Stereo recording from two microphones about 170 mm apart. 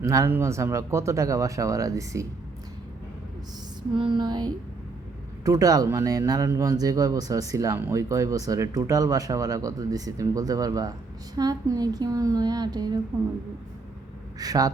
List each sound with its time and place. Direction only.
0.0 s speech: 20° right (ahead or behind)
3.9 s speech: 30° right (ahead or behind)
14.3 s speech: 20° right (ahead or behind)